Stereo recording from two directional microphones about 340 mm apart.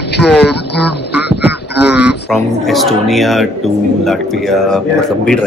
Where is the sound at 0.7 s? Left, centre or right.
Left.